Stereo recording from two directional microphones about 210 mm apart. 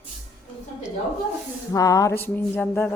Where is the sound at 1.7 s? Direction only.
15° left (ahead or behind).